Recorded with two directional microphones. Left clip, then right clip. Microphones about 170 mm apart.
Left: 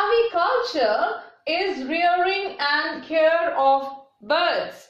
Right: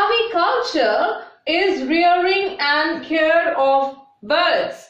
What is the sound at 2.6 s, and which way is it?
Speech, 25° left (ahead or behind).